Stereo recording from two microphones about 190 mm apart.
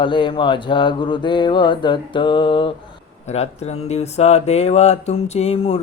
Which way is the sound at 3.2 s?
35° left (ahead or behind).